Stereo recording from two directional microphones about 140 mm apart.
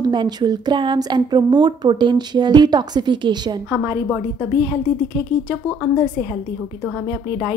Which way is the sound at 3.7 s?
15° right (ahead or behind).